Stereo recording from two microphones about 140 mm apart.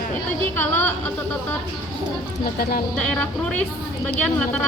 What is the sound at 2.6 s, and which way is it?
Speech, 90° left.